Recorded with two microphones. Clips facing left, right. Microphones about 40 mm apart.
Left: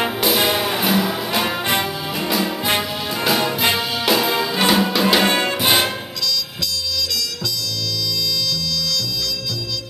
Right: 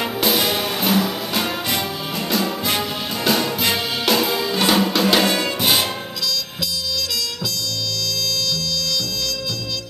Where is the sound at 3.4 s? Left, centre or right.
Centre.